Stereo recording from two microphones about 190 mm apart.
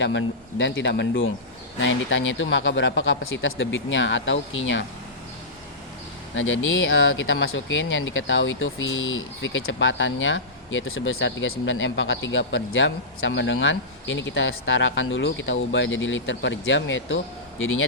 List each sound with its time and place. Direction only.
0.0 s speech: 75° left (ahead or behind)
6.3 s speech: 90° left
17.6 s speech: 90° left